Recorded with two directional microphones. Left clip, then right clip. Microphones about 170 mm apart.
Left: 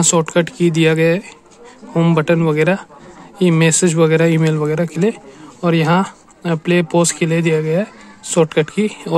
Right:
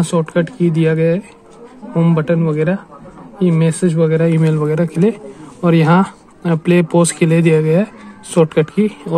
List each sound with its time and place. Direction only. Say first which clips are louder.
0.0 s speech: left 2 dB; 30° left (ahead or behind)
4.3 s a man's voice: even; 20° left (ahead or behind)